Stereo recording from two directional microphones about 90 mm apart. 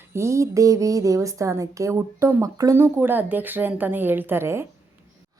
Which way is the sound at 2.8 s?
25° right (ahead or behind).